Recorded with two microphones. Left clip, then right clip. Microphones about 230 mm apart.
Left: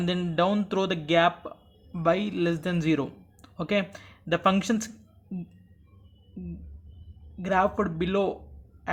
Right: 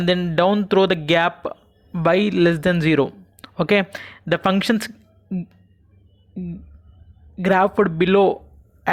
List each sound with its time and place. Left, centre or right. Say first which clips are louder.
0.0 s speech: right 8 dB; right
7.3 s speech: right 8 dB; right